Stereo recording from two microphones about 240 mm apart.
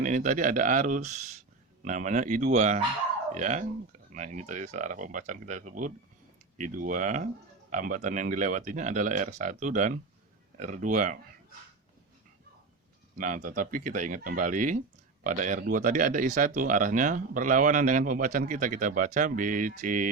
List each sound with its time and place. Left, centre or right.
0.0 s speech: right
13.1 s speech: right